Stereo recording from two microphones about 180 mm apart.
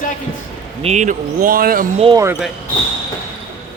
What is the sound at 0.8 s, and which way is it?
Speech, 40° right (ahead or behind).